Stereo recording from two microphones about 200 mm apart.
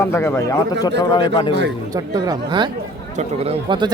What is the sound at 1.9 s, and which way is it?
Speech, 20° right (ahead or behind).